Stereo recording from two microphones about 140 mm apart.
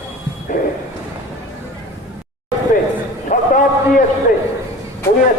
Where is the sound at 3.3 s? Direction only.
70° left (ahead or behind).